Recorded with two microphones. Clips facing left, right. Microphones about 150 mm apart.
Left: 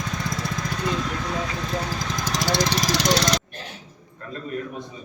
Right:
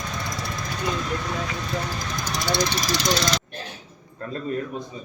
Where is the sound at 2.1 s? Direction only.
90° left; by 3.2 s 70° left (ahead or behind).